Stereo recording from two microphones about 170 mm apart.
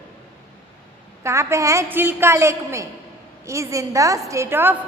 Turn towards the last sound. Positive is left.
turn(degrees=-15)  # may be behind; listen again after turning